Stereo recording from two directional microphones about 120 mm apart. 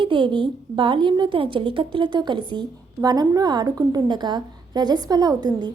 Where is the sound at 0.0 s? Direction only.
40° right (ahead or behind).